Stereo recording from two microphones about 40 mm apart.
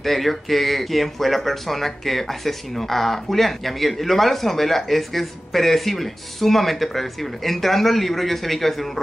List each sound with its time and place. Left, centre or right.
0.0 s speech: centre